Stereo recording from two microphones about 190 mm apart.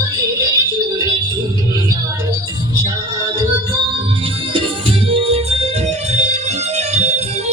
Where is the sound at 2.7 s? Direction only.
25° right (ahead or behind).